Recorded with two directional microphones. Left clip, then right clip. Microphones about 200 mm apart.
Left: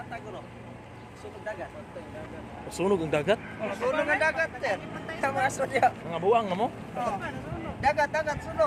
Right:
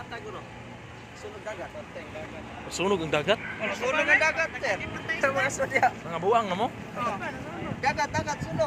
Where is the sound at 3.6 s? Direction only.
35° left (ahead or behind).